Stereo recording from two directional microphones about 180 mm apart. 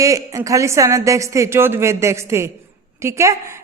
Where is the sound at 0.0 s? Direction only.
20° right (ahead or behind).